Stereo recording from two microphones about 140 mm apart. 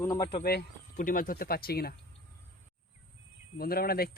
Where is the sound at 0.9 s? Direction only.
80° left.